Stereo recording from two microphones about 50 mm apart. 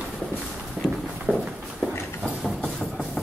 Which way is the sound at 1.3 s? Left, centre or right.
Left.